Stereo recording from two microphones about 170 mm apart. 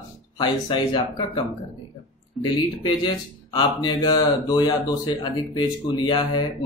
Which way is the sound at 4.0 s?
25° left (ahead or behind).